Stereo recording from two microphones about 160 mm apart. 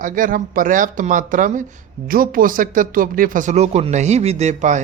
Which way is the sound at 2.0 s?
65° right (ahead or behind).